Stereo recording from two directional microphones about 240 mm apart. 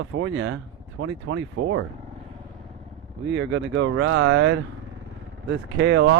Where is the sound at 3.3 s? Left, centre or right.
Right.